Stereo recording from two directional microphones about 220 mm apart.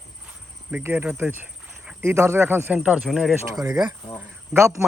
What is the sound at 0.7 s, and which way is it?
Speech, 10° right (ahead or behind).